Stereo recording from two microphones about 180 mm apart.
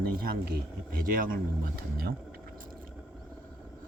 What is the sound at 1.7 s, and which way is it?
Speech, 60° right (ahead or behind).